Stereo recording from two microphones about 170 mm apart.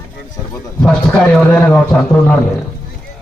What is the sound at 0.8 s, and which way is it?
A man's voice, 5° left (ahead or behind).